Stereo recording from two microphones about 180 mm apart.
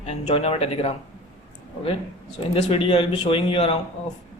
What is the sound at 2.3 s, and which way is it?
Speech, 30° left (ahead or behind).